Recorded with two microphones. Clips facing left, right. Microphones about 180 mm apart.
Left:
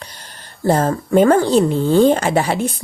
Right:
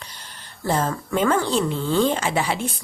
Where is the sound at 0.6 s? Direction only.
45° left (ahead or behind).